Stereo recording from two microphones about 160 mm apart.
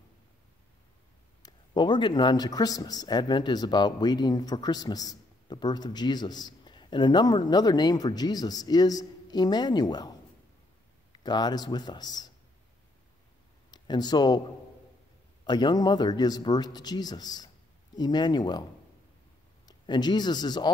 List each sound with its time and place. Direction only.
1.4 s speech: 25° left (ahead or behind)
11.2 s speech: 25° left (ahead or behind)
13.7 s speech: 25° left (ahead or behind)
15.4 s speech: 25° left (ahead or behind)
19.9 s speech: 25° left (ahead or behind)